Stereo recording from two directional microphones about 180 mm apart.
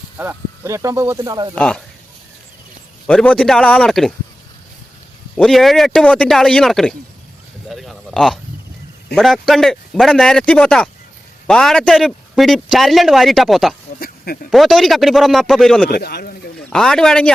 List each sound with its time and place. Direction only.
0.2 s speech: 15° right (ahead or behind)
1.5 s speech: 5° left (ahead or behind)
3.1 s speech: 5° left (ahead or behind)
5.4 s a man's voice: centre (ahead or behind)
15.9 s speech: 60° left (ahead or behind)
16.6 s speech: centre (ahead or behind)